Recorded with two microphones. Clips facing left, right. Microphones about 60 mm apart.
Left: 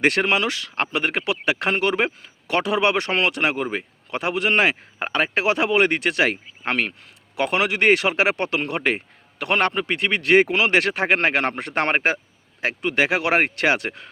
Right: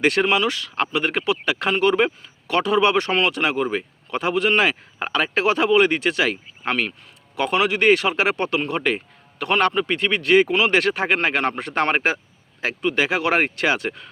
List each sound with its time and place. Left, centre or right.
0.0 s speech: left
3.0 s speech: left
5.8 s a man's voice: left
13.1 s speech: left
13.7 s speech: left